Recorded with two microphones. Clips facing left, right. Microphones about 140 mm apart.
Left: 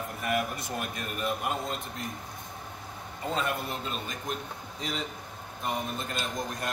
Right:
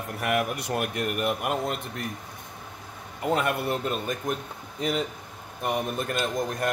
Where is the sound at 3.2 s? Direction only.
65° right (ahead or behind).